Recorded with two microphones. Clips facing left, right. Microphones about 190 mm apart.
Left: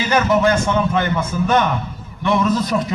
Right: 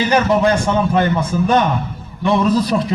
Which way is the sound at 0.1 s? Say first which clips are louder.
Left 1 dB; 35° right (ahead or behind).